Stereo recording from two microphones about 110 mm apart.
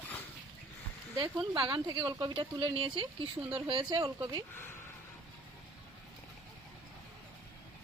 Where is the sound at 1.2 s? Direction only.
50° right (ahead or behind).